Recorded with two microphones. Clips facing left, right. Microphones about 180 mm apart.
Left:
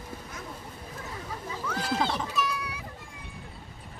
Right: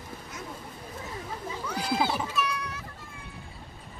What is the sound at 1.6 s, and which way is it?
Music, 10° right (ahead or behind).